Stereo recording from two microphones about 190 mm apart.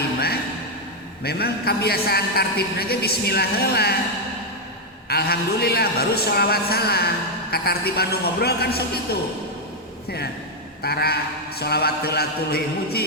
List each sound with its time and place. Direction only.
1.2 s a man's voice: 55° left (ahead or behind)
5.0 s a man's voice: 55° left (ahead or behind)
10.8 s a man's voice: 55° left (ahead or behind)